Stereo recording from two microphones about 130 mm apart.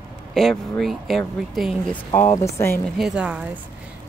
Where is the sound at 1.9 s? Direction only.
20° left (ahead or behind).